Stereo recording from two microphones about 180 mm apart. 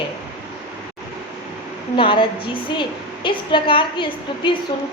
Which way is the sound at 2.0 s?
25° left (ahead or behind).